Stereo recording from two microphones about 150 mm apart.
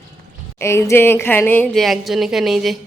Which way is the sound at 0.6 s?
20° left (ahead or behind).